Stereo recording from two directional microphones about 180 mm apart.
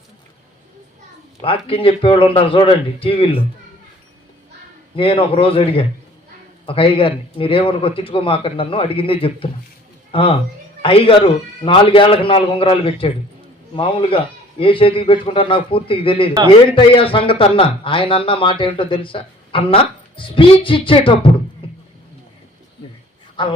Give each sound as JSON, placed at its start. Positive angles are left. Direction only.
{"t": 1.4, "sound": "a man's voice", "side_deg": 30}
{"t": 4.9, "sound": "a man's voice", "side_deg": 30}
{"t": 21.6, "sound": "rowboat", "side_deg": 30}
{"t": 23.4, "sound": "a man's voice", "side_deg": 25}